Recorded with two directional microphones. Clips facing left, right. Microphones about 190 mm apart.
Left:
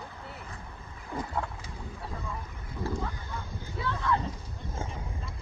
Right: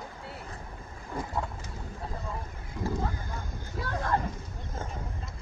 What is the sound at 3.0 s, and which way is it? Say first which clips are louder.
Boat: right 2 dB; 45° right (ahead or behind).